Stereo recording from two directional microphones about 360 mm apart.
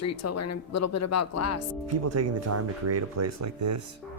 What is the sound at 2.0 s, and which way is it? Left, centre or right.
Speech, right.